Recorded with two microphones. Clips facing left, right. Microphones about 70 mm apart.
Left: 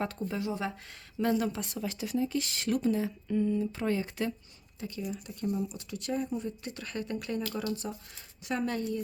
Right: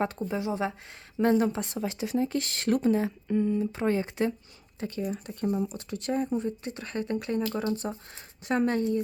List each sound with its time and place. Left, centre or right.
0.0 s speech: right
1.2 s speech: right
2.1 s speech: right
4.8 s speech: right